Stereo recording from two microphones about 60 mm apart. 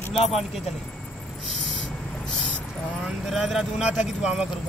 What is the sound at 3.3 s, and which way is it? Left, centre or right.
Speech, centre.